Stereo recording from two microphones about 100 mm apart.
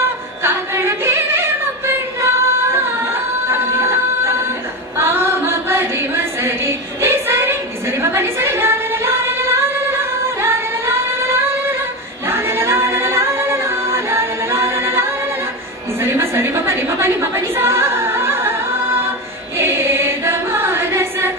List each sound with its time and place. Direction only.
0.4 s singing: 25° right (ahead or behind)
3.4 s a sound: 25° right (ahead or behind)
8.0 s singing: 25° right (ahead or behind)
12.3 s a capella: 25° right (ahead or behind)
16.0 s a sound: 25° right (ahead or behind)
19.6 s chant: 25° right (ahead or behind)